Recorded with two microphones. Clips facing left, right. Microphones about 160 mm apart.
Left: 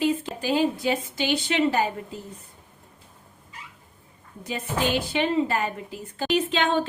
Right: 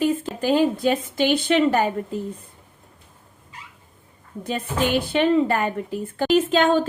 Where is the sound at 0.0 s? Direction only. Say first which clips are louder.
Right 3 dB; 50° right (ahead or behind).